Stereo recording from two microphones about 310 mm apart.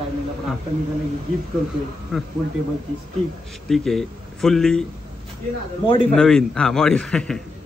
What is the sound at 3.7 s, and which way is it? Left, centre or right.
Speech, centre.